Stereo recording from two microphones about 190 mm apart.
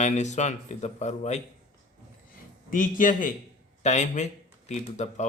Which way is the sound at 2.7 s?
45° left (ahead or behind).